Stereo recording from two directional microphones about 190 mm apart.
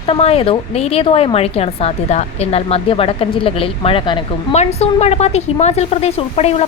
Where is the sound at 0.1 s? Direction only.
30° left (ahead or behind).